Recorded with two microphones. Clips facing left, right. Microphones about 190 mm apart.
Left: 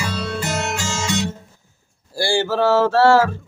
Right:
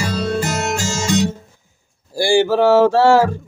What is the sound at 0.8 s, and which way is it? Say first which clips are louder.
Guitar: right 5 dB; 40° right (ahead or behind).